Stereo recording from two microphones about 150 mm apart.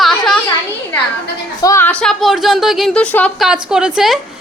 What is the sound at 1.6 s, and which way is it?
Speech, 20° left (ahead or behind).